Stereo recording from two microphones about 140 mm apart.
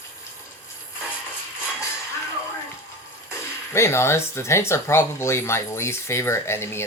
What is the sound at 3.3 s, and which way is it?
Speech, 20° left (ahead or behind).